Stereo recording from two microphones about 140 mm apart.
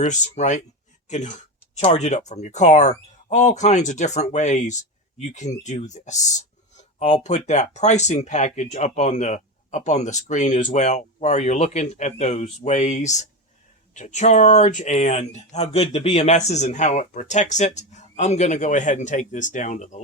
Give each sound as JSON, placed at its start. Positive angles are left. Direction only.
{"t": 0.0, "sound": "speech", "side_deg": 55}